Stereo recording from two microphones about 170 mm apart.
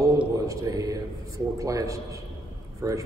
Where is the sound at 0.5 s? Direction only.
20° right (ahead or behind).